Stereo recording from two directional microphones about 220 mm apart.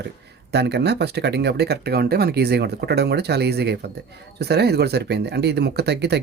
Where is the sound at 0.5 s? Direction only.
50° right (ahead or behind).